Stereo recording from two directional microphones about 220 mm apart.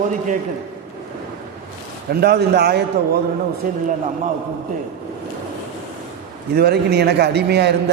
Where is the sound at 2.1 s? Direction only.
45° right (ahead or behind).